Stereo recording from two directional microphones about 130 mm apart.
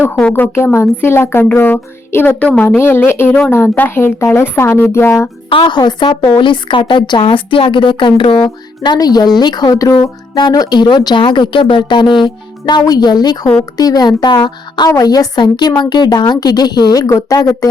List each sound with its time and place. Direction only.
0.0 s speech: 10° left (ahead or behind)
5.5 s a woman's voice: 40° left (ahead or behind)